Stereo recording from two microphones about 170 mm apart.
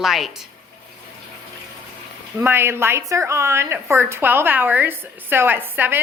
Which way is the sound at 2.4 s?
15° right (ahead or behind).